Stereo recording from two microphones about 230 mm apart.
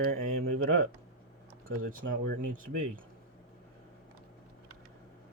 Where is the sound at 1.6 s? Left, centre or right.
Right.